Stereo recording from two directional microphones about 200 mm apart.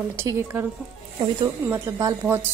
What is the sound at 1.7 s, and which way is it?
Speech, 10° right (ahead or behind).